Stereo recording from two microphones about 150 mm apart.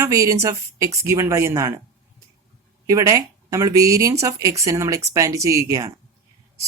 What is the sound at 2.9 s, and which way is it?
Speech, 20° right (ahead or behind).